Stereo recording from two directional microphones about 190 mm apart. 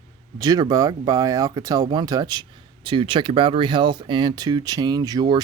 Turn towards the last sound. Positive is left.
turn(degrees=-20)  # may be behind; listen again after turning